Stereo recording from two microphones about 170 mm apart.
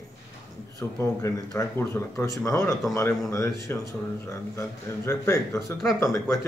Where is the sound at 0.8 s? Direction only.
15° left (ahead or behind).